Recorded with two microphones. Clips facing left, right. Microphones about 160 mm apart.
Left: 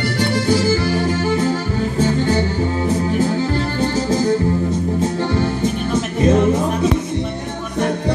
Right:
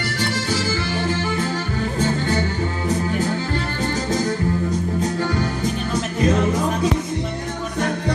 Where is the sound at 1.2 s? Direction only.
30° left (ahead or behind).